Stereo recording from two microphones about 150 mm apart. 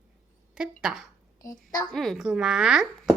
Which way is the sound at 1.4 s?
25° left (ahead or behind).